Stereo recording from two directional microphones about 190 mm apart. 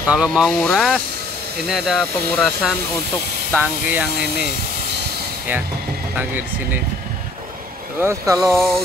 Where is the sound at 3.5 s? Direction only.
10° right (ahead or behind).